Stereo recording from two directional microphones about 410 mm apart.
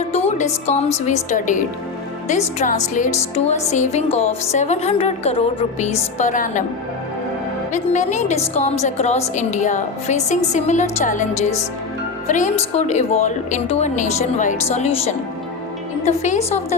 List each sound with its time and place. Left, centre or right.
0.1 s a woman's voice: centre
7.7 s a woman's voice: centre